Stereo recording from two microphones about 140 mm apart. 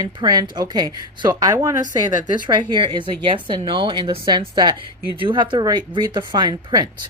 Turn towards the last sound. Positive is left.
turn(degrees=-30)  # may be behind; listen again after turning